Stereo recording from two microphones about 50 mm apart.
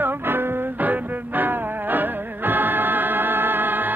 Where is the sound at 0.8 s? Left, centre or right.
Right.